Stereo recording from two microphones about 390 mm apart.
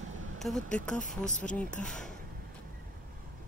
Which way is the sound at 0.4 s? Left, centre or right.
Centre.